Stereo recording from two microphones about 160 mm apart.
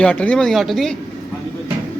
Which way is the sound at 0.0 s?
5° left (ahead or behind).